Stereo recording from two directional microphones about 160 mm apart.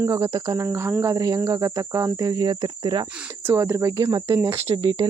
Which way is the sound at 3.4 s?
15° right (ahead or behind).